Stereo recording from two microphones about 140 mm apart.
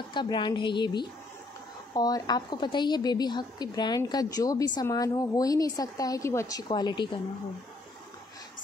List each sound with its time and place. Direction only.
0.1 s a woman's voice: 35° left (ahead or behind)